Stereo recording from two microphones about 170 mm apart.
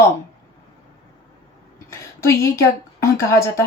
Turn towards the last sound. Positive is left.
turn(degrees=15)  # may be behind; listen again after turning